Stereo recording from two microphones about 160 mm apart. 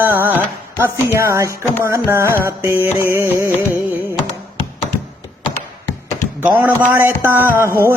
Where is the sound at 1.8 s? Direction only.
15° right (ahead or behind).